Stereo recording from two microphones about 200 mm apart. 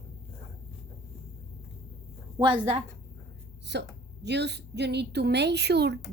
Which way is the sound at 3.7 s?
60° right (ahead or behind).